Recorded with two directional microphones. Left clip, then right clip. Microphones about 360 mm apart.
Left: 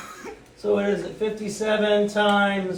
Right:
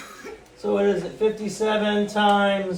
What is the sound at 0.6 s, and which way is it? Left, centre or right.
A man's voice, centre.